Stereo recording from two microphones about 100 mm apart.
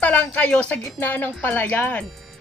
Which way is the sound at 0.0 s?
15° left (ahead or behind).